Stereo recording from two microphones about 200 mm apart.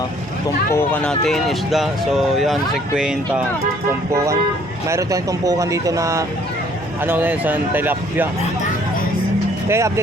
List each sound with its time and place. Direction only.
0.7 s speech: 5° left (ahead or behind)
4.9 s speech: 15° right (ahead or behind)
9.6 s speech: 15° right (ahead or behind)